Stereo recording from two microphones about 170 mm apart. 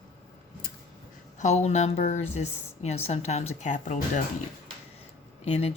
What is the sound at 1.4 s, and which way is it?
A woman's voice, 40° left (ahead or behind).